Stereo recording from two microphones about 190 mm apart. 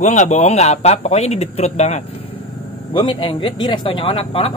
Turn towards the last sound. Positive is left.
turn(degrees=30)  # may be behind; listen again after turning